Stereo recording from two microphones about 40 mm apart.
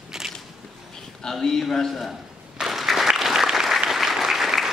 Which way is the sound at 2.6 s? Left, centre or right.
Centre.